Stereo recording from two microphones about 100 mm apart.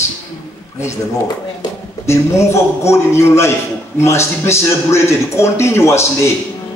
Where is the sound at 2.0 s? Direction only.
30° left (ahead or behind).